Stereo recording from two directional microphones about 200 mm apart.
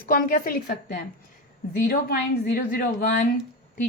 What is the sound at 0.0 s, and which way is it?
A woman's voice, 45° left (ahead or behind).